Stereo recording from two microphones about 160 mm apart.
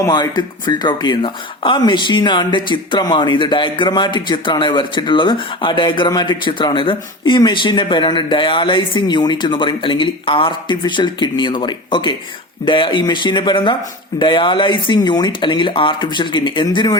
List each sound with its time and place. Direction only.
0.0 s speech: 25° left (ahead or behind)